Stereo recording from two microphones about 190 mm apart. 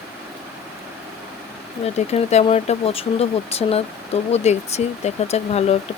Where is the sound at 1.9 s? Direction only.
35° left (ahead or behind).